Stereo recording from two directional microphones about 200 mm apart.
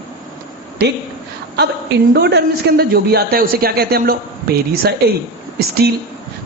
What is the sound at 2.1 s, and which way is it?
A man's voice, 55° right (ahead or behind).